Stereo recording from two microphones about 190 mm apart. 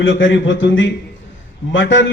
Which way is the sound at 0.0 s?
75° left (ahead or behind).